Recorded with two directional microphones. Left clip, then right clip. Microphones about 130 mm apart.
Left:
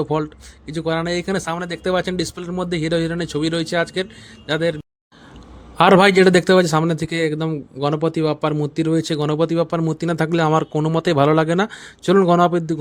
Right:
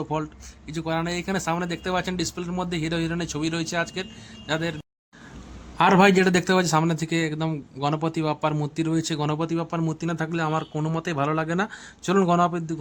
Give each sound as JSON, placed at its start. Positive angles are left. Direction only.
{"t": 0.0, "sound": "a man's voice", "side_deg": 35}